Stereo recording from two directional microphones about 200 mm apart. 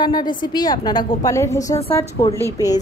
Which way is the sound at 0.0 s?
20° left (ahead or behind).